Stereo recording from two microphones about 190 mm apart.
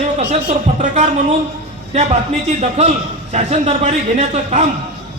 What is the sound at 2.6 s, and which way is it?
A man's voice, 35° right (ahead or behind).